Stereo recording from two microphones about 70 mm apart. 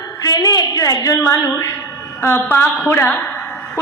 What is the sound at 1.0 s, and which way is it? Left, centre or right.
Speech, left.